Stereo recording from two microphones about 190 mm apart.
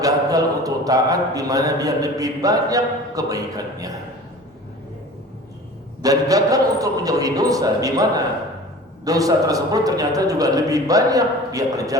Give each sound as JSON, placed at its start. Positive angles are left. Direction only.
{"t": 0.0, "sound": "speech", "side_deg": -20}
{"t": 6.0, "sound": "speech", "side_deg": -20}